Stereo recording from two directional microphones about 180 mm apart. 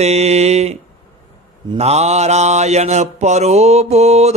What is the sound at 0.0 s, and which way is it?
Mantra, 35° right (ahead or behind).